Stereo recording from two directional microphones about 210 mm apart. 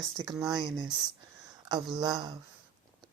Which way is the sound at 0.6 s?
20° right (ahead or behind).